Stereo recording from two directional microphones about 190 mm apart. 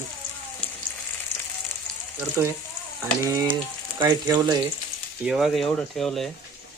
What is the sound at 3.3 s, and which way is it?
Frying, 15° right (ahead or behind).